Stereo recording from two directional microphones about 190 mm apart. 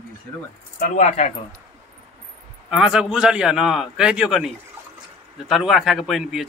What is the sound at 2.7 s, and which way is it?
A man's voice, 5° right (ahead or behind).